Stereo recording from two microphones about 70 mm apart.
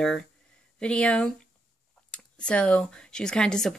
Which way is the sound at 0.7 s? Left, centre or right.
Centre.